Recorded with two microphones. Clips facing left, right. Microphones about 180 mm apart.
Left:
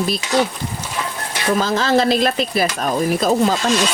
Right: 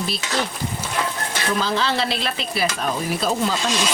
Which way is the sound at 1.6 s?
45° left (ahead or behind).